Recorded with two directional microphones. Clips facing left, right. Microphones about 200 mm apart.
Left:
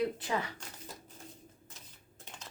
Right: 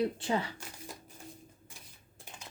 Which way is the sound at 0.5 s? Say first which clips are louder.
Right 2 dB; 10° right (ahead or behind).